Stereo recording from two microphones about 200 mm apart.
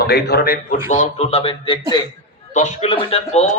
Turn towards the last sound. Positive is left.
turn(degrees=30)  # may be behind; listen again after turning